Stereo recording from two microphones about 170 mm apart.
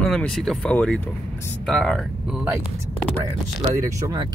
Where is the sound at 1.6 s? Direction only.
Centre (ahead or behind).